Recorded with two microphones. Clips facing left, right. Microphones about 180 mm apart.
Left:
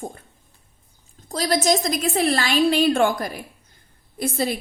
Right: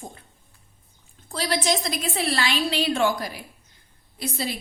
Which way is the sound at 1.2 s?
40° left (ahead or behind).